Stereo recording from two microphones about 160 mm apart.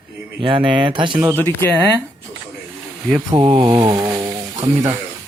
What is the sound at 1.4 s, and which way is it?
Speech, 15° left (ahead or behind).